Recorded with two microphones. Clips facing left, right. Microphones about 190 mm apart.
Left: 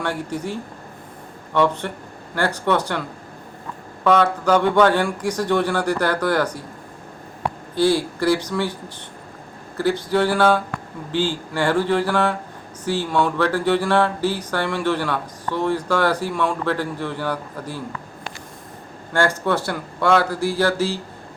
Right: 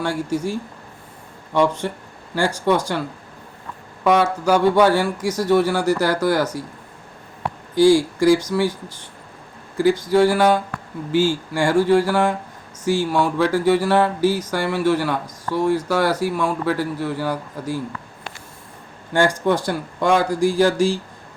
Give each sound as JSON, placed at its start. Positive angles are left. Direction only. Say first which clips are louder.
{"t": 0.0, "sound": "music", "louder": "right 3 dB", "side_deg": -10}
{"t": 4.0, "sound": "music", "louder": "even", "side_deg": -10}
{"t": 7.8, "sound": "music", "louder": "right 5 dB", "side_deg": -10}
{"t": 19.1, "sound": "music", "louder": "right 2 dB", "side_deg": -15}